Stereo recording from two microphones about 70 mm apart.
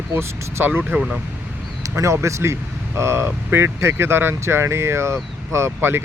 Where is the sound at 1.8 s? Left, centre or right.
Right.